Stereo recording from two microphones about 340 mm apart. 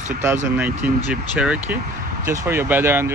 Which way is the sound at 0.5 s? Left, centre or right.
Centre.